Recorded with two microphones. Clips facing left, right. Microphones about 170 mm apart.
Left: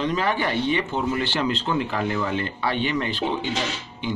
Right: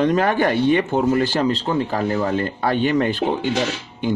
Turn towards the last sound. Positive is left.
turn(degrees=-50)  # may be behind; listen again after turning